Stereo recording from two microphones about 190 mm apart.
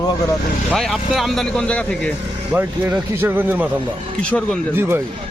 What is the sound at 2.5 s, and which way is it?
Speech, 10° right (ahead or behind).